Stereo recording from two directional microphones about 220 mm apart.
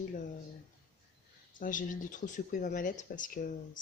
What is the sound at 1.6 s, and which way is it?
Speech, 35° left (ahead or behind).